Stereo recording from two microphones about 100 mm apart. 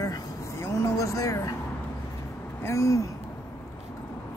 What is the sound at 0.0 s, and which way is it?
Vehicle, 35° left (ahead or behind).